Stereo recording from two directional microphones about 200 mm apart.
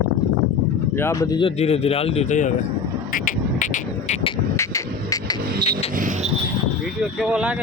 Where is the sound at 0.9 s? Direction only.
15° left (ahead or behind); by 2.5 s 35° left (ahead or behind).